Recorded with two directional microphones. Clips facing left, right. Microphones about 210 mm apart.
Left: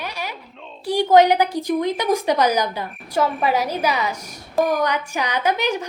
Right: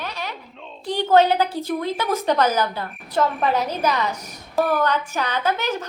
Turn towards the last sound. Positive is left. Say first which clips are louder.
# left 2 dB
turn(degrees=15)  # may be behind; listen again after turning